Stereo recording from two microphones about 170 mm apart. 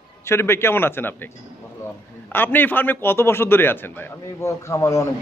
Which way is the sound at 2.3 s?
10° left (ahead or behind).